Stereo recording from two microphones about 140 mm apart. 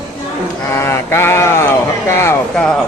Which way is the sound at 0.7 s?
20° left (ahead or behind).